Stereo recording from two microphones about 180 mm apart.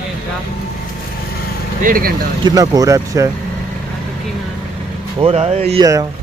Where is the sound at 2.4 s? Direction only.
20° right (ahead or behind).